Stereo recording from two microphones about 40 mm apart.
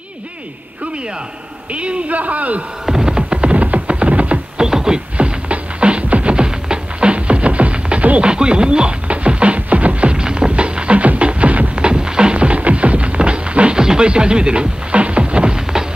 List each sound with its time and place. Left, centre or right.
1.7 s a man's voice: right
2.9 s music: centre; by 4.4 s right
4.6 s music: centre
5.1 s music: right
6.3 s music: right
10.1 s music: right
11.7 s music: right